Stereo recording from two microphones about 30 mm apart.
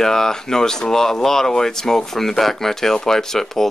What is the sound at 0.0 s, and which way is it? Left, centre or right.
Speech, centre.